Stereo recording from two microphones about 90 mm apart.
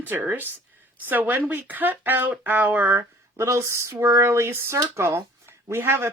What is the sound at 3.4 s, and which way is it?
Speech, 35° right (ahead or behind).